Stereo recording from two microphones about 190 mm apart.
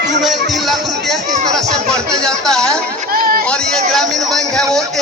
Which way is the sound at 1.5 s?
5° left (ahead or behind).